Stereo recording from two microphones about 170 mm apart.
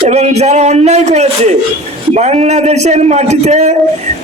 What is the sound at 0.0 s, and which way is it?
Speech, 40° right (ahead or behind).